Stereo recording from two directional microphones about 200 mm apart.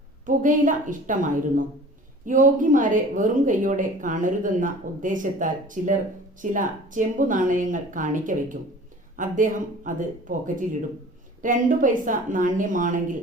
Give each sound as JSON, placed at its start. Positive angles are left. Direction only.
{"t": 0.3, "sound": "speech", "side_deg": -40}